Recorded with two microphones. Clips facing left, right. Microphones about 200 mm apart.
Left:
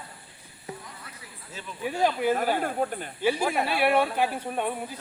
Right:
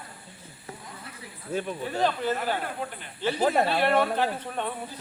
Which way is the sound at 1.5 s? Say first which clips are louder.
Right 14 dB; 55° right (ahead or behind).